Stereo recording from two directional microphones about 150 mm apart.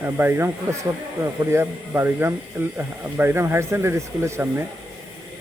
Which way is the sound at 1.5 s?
15° right (ahead or behind).